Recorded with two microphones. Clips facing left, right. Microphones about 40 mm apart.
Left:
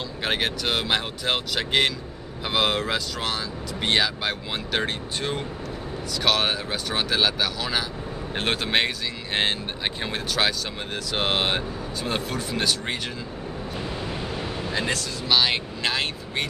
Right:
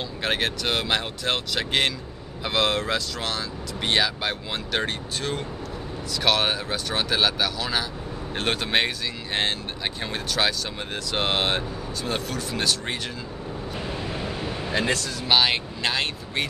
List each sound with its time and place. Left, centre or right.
0.2 s speech: centre
6.1 s speech: centre
9.4 s speech: centre
13.8 s waves: centre
14.5 s a sound: centre
15.2 s speech: centre
15.5 s speech: centre